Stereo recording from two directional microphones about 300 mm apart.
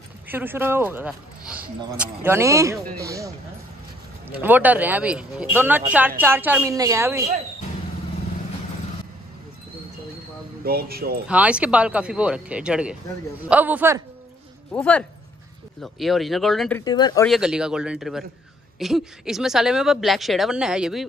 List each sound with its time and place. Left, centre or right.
0.3 s speech: centre
4.4 s speech: centre
10.6 s speech: right
11.2 s speech: centre
14.7 s speech: centre
16.8 s speech: centre
17.3 s speech: centre